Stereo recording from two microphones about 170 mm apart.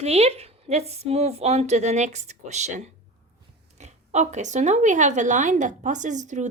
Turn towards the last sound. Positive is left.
turn(degrees=-45)  # may be behind; listen again after turning